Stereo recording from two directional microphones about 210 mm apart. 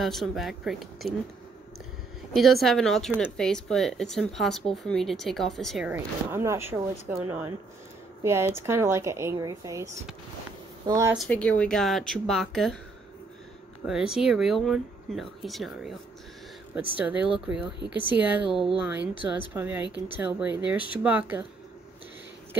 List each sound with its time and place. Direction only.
0.0 s speech: centre (ahead or behind)
2.3 s speech: centre (ahead or behind)
5.9 s speech: 10° right (ahead or behind)
10.9 s speech: 15° right (ahead or behind)
11.1 s speech: 5° left (ahead or behind)
13.8 s speech: 5° right (ahead or behind)
17.0 s speech: 5° right (ahead or behind)